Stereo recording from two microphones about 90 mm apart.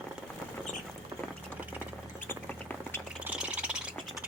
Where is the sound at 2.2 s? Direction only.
25° left (ahead or behind).